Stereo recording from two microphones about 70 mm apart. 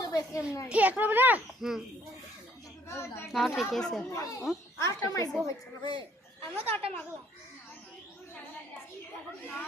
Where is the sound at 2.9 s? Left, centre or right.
Left.